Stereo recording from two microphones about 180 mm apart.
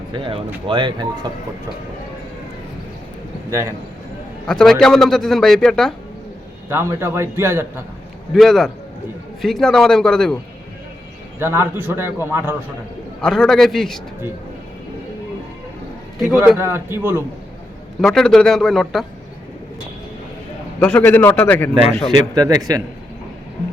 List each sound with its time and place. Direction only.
0.1 s speech: 30° right (ahead or behind)
3.5 s a man's voice: 15° right (ahead or behind)
4.4 s a man's voice: 5° left (ahead or behind)
6.7 s a man's voice: 15° right (ahead or behind)
8.3 s a man's voice: centre (ahead or behind)
11.3 s a man's voice: 10° right (ahead or behind)
13.2 s a man's voice: 5° left (ahead or behind)
16.5 s a man's voice: 10° right (ahead or behind)
18.0 s a man's voice: 5° left (ahead or behind)
20.7 s a man's voice: 10° left (ahead or behind)
22.4 s speech: 20° right (ahead or behind)